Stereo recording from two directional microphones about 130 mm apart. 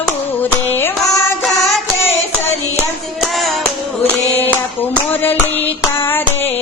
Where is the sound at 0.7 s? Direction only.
15° left (ahead or behind).